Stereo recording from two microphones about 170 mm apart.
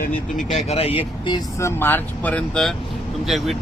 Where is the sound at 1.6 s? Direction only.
10° left (ahead or behind).